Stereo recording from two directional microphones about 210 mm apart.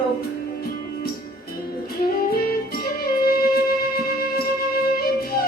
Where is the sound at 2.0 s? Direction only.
45° left (ahead or behind).